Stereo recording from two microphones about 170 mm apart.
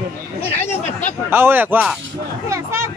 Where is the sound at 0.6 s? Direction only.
40° left (ahead or behind).